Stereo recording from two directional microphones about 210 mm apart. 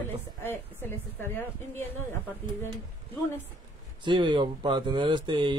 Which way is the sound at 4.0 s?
20° right (ahead or behind).